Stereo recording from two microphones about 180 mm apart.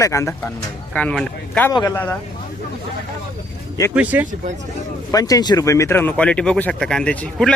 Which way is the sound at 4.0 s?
10° right (ahead or behind).